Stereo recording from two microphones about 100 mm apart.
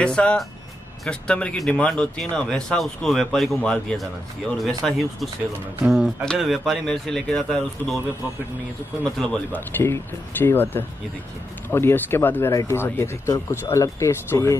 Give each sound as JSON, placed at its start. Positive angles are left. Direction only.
{"t": 0.0, "sound": "speech", "side_deg": 10}
{"t": 9.0, "sound": "speech", "side_deg": 10}
{"t": 9.7, "sound": "speech", "side_deg": 20}